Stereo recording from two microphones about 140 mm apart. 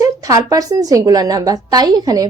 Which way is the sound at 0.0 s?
25° right (ahead or behind).